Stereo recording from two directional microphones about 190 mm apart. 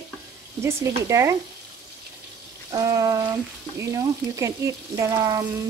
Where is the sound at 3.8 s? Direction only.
15° right (ahead or behind).